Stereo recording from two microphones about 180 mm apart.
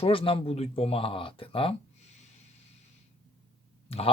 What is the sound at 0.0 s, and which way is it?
Speech, 30° left (ahead or behind).